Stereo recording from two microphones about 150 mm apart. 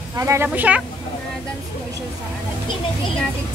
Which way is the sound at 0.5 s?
10° right (ahead or behind).